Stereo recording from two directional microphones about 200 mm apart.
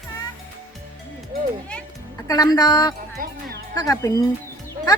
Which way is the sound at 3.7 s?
15° left (ahead or behind).